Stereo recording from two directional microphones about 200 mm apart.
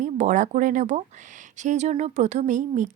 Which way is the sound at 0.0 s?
40° right (ahead or behind).